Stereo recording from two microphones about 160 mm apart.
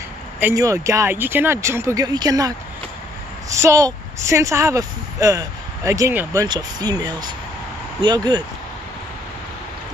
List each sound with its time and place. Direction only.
0.4 s speech: 15° right (ahead or behind)